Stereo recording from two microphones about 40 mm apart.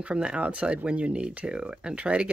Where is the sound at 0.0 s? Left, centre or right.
Right.